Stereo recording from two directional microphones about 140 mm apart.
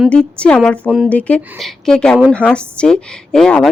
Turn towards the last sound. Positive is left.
turn(degrees=5)  # may be behind; listen again after turning